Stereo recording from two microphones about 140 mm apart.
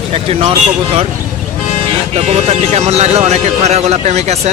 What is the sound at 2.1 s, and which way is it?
Speech, 50° right (ahead or behind).